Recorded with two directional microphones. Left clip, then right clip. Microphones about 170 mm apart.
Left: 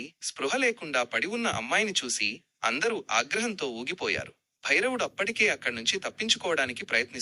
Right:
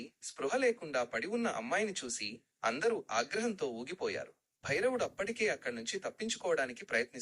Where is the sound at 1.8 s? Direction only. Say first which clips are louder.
Left 9 dB; 20° left (ahead or behind).